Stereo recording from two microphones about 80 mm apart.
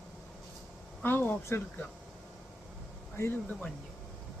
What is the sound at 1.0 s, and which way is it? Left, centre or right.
Speech, left.